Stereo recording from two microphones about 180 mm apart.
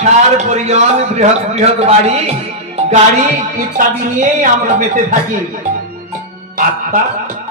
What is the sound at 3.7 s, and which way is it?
Speech, 50° right (ahead or behind).